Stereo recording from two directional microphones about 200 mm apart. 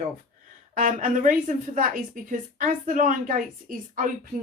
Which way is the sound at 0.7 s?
40° right (ahead or behind).